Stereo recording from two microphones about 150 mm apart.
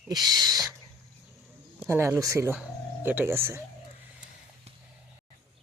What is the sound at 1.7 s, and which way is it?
Speech, 15° right (ahead or behind).